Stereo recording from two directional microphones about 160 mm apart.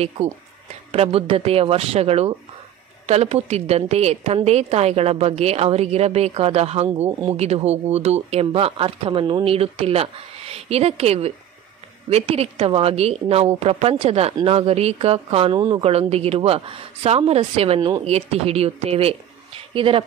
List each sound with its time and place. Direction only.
0.9 s speech: 40° right (ahead or behind)
17.7 s a woman's voice: 25° right (ahead or behind)
18.0 s a woman's voice: 40° right (ahead or behind)